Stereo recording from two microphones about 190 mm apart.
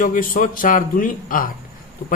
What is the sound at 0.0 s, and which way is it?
Speech, 45° left (ahead or behind).